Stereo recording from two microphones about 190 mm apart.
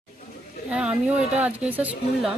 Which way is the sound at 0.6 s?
5° right (ahead or behind).